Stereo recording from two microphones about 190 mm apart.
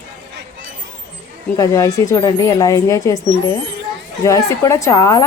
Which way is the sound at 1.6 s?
15° left (ahead or behind).